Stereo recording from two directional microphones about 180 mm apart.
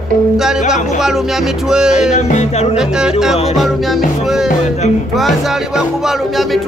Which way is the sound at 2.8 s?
5° right (ahead or behind).